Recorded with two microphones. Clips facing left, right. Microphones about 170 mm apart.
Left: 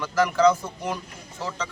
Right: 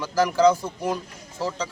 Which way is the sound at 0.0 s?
35° right (ahead or behind).